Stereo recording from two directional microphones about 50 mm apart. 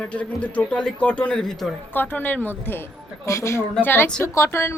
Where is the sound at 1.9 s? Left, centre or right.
Left.